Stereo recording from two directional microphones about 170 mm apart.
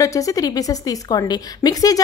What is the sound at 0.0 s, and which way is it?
A woman's voice, 20° left (ahead or behind).